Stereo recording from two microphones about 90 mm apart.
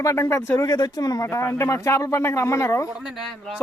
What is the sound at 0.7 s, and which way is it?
Speech, 45° left (ahead or behind).